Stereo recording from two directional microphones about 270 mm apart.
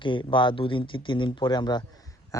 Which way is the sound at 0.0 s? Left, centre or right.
Centre.